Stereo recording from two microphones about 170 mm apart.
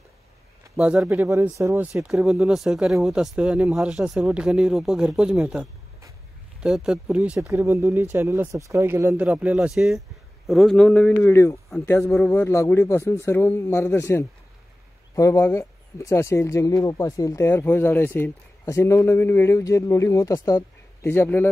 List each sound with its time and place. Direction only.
0.7 s speech: 5° right (ahead or behind); by 21.5 s 10° left (ahead or behind)